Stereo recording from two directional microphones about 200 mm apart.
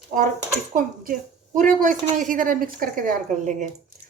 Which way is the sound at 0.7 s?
40° right (ahead or behind).